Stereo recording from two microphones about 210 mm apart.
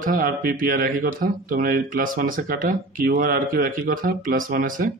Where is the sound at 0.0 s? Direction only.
40° right (ahead or behind).